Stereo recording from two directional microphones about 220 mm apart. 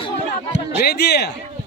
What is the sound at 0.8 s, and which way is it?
Speech, 45° left (ahead or behind).